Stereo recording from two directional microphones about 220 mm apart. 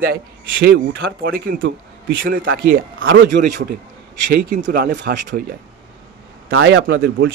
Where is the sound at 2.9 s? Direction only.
60° right (ahead or behind).